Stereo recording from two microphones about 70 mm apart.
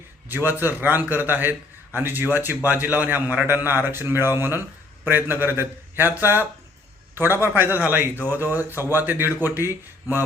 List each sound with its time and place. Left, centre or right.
0.3 s a man's voice: right